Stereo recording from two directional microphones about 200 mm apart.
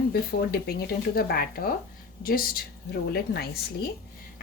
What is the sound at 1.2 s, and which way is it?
A woman's voice, 50° left (ahead or behind).